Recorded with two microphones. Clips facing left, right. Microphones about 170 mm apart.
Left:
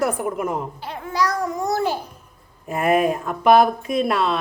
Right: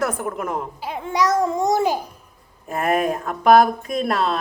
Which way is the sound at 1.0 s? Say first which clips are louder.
Right 3 dB; 20° right (ahead or behind).